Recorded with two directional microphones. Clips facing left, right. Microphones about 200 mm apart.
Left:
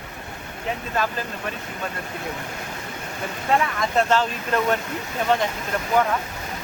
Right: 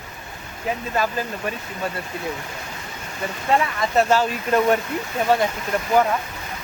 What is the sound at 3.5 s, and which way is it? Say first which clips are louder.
Speech: right 1 dB; 5° right (ahead or behind).